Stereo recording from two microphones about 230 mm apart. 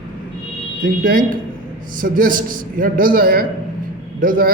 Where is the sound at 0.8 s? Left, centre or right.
Right.